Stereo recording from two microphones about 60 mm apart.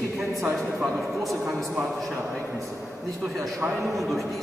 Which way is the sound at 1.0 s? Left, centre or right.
Centre.